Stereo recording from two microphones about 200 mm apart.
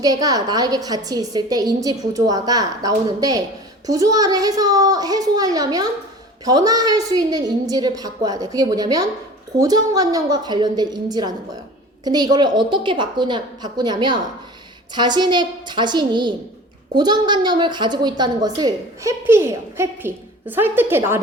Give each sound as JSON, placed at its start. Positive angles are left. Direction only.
{"t": 0.0, "sound": "a woman's voice", "side_deg": -20}